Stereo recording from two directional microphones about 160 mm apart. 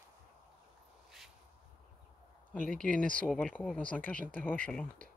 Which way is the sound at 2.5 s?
5° left (ahead or behind).